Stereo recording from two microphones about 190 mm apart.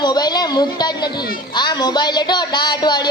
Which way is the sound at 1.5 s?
20° left (ahead or behind).